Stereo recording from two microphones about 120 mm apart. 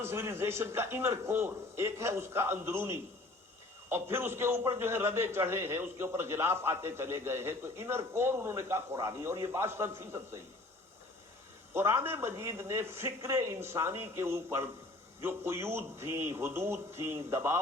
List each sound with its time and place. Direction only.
0.0 s a man's voice: 20° right (ahead or behind)
11.7 s a man's voice: 20° right (ahead or behind)